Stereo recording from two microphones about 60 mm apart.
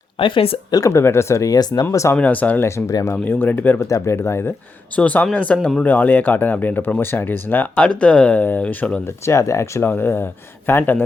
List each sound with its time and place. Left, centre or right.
0.7 s speech: left
0.9 s speech: left
1.5 s speech: left
2.1 s speech: left
2.6 s speech: left
3.2 s speech: left
3.8 s speech: left
4.9 s speech: left
7.8 s speech: centre
9.0 s speech: left
9.9 s speech: left